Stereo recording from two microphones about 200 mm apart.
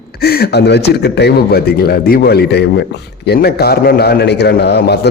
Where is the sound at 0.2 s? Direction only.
50° left (ahead or behind).